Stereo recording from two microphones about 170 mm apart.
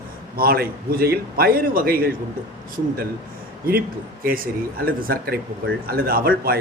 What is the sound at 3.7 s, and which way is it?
A man's voice, 60° right (ahead or behind).